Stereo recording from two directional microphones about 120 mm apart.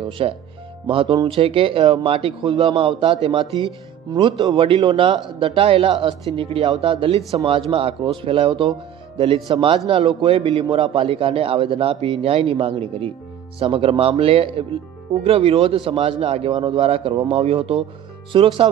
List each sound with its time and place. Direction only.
0.2 s a man's voice: 50° right (ahead or behind)